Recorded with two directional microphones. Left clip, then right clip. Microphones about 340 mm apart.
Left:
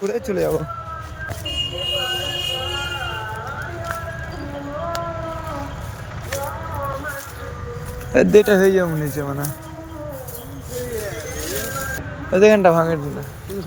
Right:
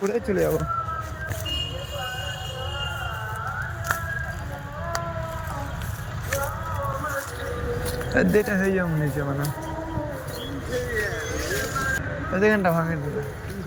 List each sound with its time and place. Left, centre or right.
0.0 s speech: centre
8.1 s speech: centre
12.3 s speech: centre